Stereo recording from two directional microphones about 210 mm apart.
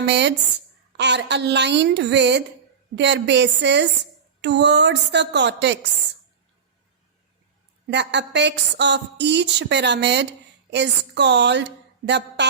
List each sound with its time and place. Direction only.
0.0 s a woman's voice: 55° right (ahead or behind)
7.9 s a woman's voice: 55° right (ahead or behind)